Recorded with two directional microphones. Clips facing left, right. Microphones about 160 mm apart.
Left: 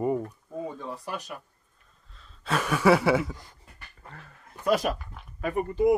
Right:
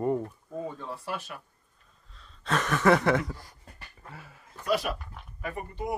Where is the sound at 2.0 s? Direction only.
Centre (ahead or behind).